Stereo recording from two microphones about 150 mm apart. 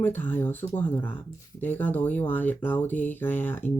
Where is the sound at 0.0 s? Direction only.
15° left (ahead or behind).